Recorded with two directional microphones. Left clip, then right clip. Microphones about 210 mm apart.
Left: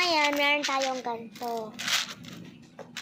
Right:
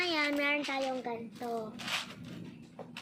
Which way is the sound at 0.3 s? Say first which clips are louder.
Left 6 dB; 10° right (ahead or behind).